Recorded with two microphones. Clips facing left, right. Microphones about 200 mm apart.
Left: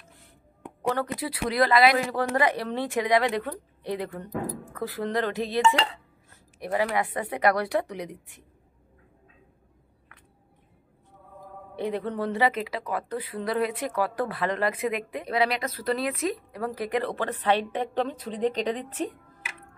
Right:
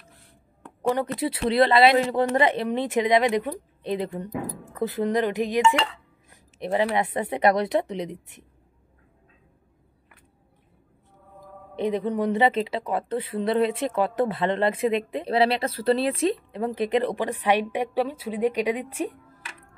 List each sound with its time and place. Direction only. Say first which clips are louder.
1.2 s a woman's voice: right 5 dB; 25° right (ahead or behind)
11.7 s speech: right 4 dB; 20° right (ahead or behind)